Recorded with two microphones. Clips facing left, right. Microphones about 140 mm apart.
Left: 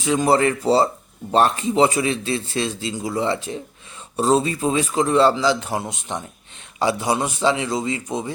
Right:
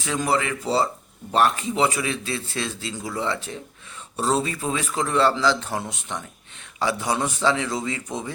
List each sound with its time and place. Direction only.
0.0 s speech: 20° left (ahead or behind)
0.3 s a man's voice: 40° left (ahead or behind); by 8.3 s 15° left (ahead or behind)